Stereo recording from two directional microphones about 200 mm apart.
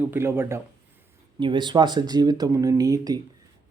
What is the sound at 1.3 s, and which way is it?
A man's voice, 25° right (ahead or behind).